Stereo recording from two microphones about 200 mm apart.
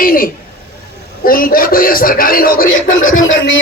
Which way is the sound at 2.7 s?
75° left (ahead or behind).